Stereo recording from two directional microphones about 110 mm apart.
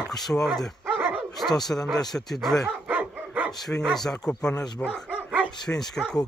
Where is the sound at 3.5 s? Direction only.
5° left (ahead or behind).